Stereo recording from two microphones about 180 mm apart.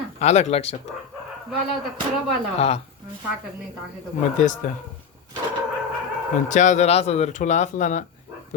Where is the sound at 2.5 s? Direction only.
35° left (ahead or behind).